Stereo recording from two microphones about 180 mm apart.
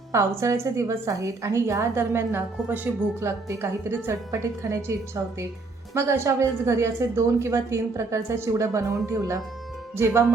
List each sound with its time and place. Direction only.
0.1 s a woman's voice: 15° right (ahead or behind)